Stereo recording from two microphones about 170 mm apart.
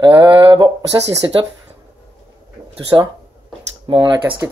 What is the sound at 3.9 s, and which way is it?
Speech, 30° right (ahead or behind).